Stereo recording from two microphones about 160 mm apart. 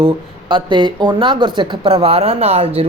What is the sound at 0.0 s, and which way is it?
A woman's voice, 30° right (ahead or behind).